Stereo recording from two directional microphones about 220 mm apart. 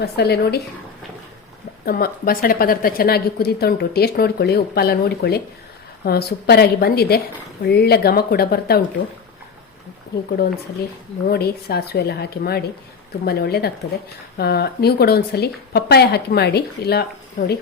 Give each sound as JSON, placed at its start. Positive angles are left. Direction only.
{"t": 0.0, "sound": "a woman's voice", "side_deg": 45}
{"t": 1.8, "sound": "a woman's voice", "side_deg": 40}
{"t": 11.3, "sound": "a woman's voice", "side_deg": 45}